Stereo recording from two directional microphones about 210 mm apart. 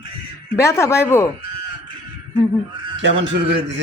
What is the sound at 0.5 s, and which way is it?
Speech, 15° left (ahead or behind).